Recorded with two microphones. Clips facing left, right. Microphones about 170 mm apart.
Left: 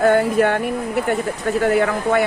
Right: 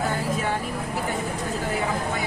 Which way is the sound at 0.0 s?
65° left (ahead or behind).